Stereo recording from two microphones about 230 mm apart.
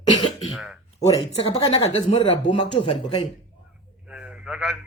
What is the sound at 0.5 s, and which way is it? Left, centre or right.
Speech, centre.